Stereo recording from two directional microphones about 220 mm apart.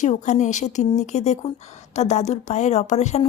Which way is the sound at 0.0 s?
35° left (ahead or behind).